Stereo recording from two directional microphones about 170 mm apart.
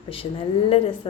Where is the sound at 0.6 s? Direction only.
35° left (ahead or behind).